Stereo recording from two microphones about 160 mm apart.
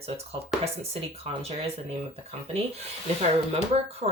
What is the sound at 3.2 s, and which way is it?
Speech, 40° right (ahead or behind).